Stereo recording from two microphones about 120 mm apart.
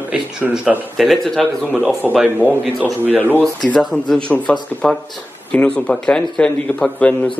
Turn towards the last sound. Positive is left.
turn(degrees=5)  # may be behind; listen again after turning